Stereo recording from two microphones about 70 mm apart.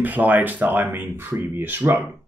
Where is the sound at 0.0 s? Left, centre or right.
Right.